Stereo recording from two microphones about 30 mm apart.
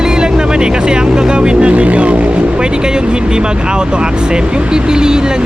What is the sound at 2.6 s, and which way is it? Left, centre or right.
Speech, right.